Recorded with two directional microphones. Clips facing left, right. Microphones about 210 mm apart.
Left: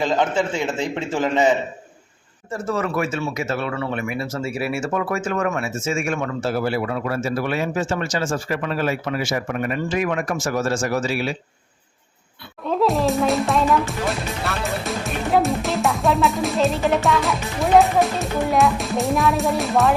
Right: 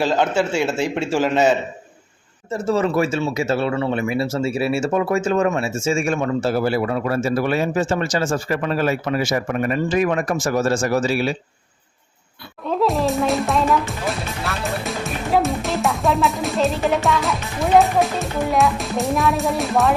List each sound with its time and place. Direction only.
0.0 s a man's voice: 10° right (ahead or behind)
2.5 s speech: 25° right (ahead or behind)
12.6 s music: centre (ahead or behind)